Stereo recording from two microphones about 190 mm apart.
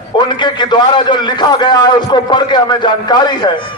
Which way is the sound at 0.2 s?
25° left (ahead or behind).